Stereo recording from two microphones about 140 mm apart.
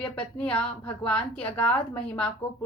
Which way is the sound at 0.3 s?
10° left (ahead or behind).